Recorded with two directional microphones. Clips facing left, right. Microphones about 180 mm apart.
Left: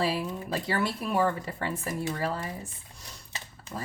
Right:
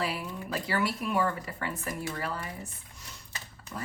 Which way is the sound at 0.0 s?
30° left (ahead or behind).